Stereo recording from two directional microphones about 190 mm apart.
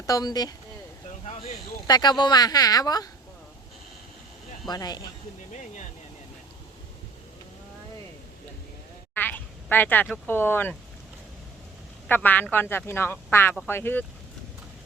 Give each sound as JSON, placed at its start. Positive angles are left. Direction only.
{"t": 0.0, "sound": "speech", "side_deg": 20}
{"t": 1.9, "sound": "speech", "side_deg": 20}
{"t": 4.7, "sound": "speech", "side_deg": 20}
{"t": 9.1, "sound": "speech", "side_deg": 10}
{"t": 12.0, "sound": "speech", "side_deg": 10}